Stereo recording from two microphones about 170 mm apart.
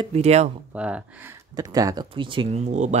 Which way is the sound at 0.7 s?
5° right (ahead or behind).